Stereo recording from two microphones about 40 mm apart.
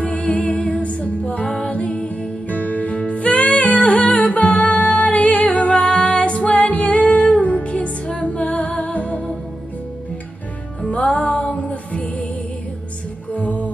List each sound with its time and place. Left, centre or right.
0.0 s music: left
10.8 s music: left
13.3 s music: left